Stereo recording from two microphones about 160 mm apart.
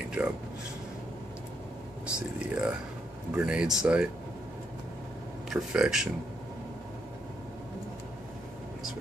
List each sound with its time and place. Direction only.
0.2 s speech: 10° right (ahead or behind)
2.1 s speech: 5° right (ahead or behind)
5.5 s speech: 5° right (ahead or behind)